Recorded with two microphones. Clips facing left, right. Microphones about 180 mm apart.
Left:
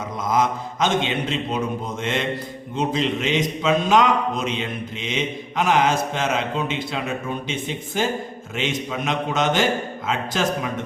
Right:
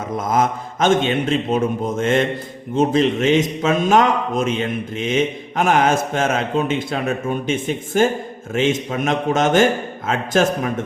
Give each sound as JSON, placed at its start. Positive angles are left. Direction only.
{"t": 0.2, "sound": "a man's voice", "side_deg": -50}